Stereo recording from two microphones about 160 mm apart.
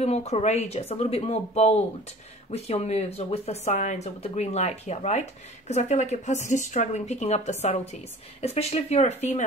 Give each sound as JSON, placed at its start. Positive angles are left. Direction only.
{"t": 0.0, "sound": "speech", "side_deg": 40}